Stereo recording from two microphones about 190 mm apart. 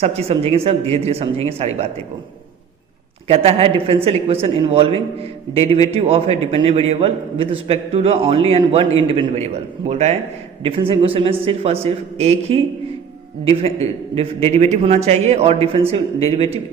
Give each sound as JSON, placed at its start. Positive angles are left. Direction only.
{"t": 0.0, "sound": "a man's voice", "side_deg": -30}
{"t": 3.2, "sound": "a man's voice", "side_deg": -30}